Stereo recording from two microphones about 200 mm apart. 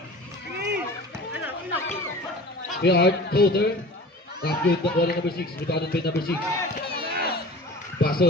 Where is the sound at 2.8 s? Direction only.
55° left (ahead or behind).